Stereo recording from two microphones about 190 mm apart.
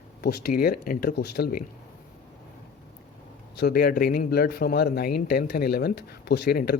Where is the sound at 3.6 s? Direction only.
60° left (ahead or behind).